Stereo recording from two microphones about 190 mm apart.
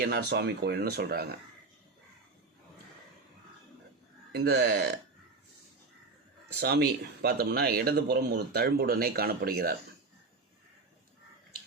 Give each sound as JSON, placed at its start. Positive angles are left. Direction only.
{"t": 0.0, "sound": "speech", "side_deg": -55}
{"t": 4.3, "sound": "speech", "side_deg": -55}
{"t": 6.6, "sound": "speech", "side_deg": -55}